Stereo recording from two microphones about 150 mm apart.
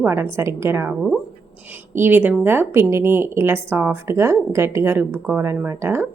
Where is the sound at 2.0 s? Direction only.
15° right (ahead or behind).